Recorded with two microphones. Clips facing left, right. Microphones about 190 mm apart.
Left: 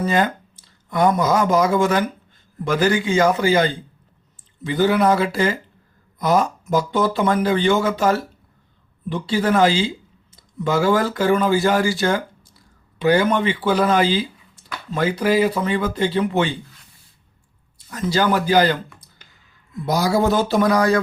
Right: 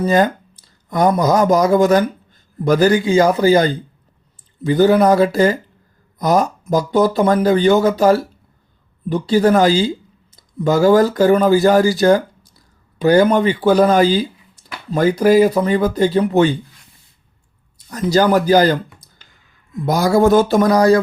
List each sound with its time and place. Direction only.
0.0 s speech: 40° right (ahead or behind)
17.9 s speech: 40° right (ahead or behind)